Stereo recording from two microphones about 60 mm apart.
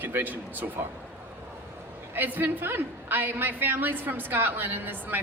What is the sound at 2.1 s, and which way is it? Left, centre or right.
A woman's voice, right.